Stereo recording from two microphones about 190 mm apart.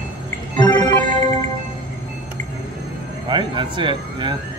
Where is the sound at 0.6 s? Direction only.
25° left (ahead or behind).